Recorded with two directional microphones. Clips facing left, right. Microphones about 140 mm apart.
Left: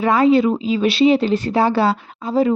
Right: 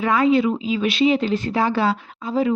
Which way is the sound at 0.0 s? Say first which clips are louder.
Left 3 dB; 30° left (ahead or behind).